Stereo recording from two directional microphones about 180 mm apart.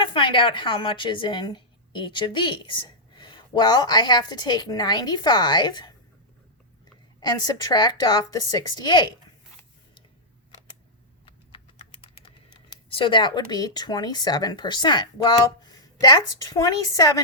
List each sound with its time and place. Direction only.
0.0 s a woman's voice: 30° left (ahead or behind)
7.2 s a woman's voice: 20° left (ahead or behind)
11.8 s speech: 30° left (ahead or behind)